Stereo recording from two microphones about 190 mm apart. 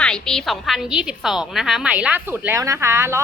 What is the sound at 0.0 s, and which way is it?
A woman's voice, 5° left (ahead or behind).